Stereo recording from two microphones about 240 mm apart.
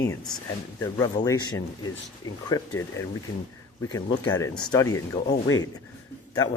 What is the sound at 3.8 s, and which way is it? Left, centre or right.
Speech, centre.